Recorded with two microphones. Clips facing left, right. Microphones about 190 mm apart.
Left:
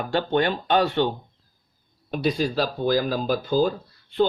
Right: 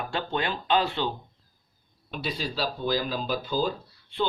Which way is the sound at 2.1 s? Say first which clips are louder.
Left 9 dB; 45° left (ahead or behind).